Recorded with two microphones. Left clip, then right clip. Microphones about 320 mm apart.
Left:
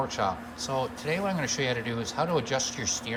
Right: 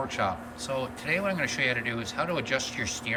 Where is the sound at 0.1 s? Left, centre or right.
Centre.